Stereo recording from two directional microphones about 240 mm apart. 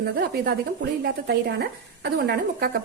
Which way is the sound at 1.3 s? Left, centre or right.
Right.